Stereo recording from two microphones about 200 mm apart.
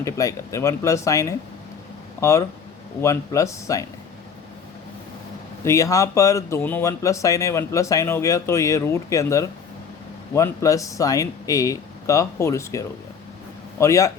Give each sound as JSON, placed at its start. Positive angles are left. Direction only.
{"t": 0.0, "sound": "speech", "side_deg": 15}
{"t": 3.0, "sound": "speech", "side_deg": 15}
{"t": 5.6, "sound": "speech", "side_deg": 15}